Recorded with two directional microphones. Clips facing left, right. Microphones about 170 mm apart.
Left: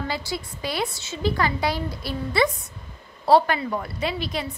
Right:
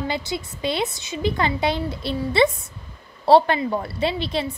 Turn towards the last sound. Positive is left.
turn(degrees=-30)  # may be behind; listen again after turning